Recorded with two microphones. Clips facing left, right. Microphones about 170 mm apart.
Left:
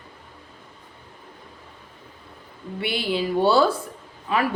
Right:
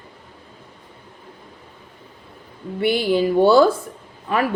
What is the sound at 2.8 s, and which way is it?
Speech, 45° right (ahead or behind).